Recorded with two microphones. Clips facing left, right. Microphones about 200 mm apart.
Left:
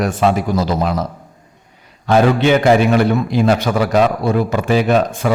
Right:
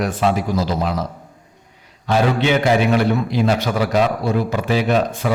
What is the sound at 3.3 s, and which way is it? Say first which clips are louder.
A man's voice: left 4 dB; 50° left (ahead or behind).